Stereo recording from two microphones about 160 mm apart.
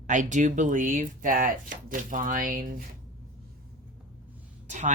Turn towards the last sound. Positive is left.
turn(degrees=-50)  # may be behind; listen again after turning